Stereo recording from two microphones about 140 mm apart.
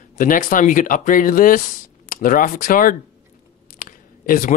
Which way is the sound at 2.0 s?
85° left.